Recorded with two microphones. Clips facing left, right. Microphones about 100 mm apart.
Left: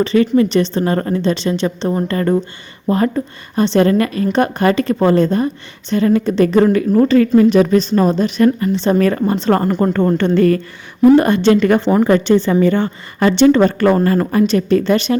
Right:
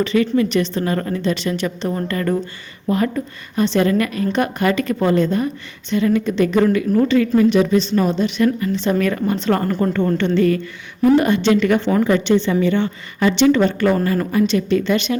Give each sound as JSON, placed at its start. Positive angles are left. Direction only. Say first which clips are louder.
{"t": 0.0, "sound": "a woman's voice", "louder": "left 4 dB", "side_deg": 35}